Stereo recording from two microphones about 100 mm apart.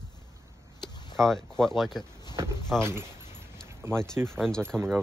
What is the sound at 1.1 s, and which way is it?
Speech, 5° left (ahead or behind).